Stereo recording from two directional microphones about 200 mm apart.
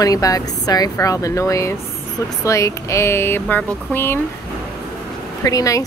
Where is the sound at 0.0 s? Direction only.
15° left (ahead or behind).